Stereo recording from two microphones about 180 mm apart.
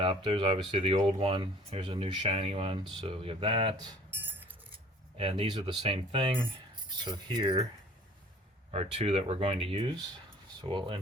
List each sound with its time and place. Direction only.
0.3 s speech: 30° right (ahead or behind)
5.1 s speech: 30° right (ahead or behind)
8.7 s speech: 35° right (ahead or behind)